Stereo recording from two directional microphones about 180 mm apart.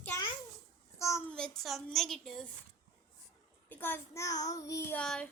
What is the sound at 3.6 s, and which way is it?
Child singing, 10° left (ahead or behind).